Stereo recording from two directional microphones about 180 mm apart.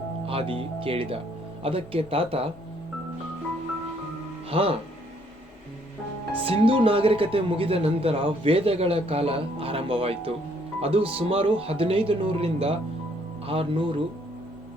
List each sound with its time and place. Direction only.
0.3 s speech: 30° right (ahead or behind)
4.4 s speech: 30° right (ahead or behind)
6.4 s speech: 30° right (ahead or behind)